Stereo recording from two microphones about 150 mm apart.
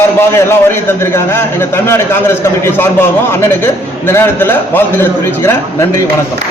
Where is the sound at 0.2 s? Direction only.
15° left (ahead or behind).